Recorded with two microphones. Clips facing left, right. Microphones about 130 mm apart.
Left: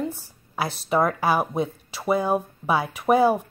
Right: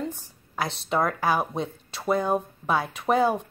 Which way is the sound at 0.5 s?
5° left (ahead or behind).